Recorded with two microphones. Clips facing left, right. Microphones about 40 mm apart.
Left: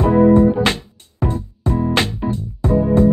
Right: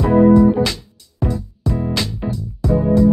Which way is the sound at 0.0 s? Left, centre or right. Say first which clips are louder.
Right 1 dB; left.